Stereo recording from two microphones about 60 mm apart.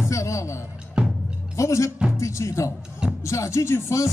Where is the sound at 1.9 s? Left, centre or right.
Centre.